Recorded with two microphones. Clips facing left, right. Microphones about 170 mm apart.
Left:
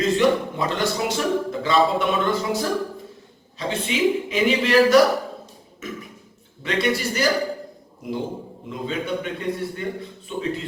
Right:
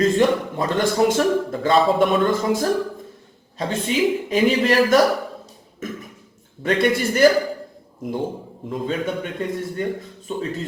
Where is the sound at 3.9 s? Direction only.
40° right (ahead or behind).